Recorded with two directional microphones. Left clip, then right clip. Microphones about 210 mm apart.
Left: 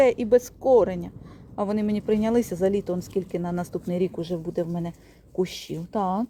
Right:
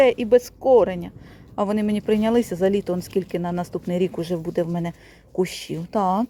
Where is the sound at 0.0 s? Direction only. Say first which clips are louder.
Right 3 dB; 5° right (ahead or behind).